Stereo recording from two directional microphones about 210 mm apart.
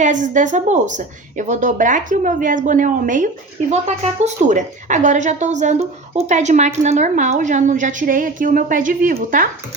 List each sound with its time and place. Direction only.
0.0 s a woman's voice: 35° right (ahead or behind)